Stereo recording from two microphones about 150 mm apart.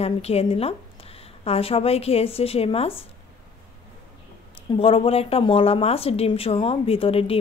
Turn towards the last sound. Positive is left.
turn(degrees=40)  # may be behind; listen again after turning